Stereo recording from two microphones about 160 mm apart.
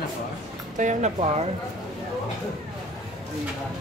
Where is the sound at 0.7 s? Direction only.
50° right (ahead or behind).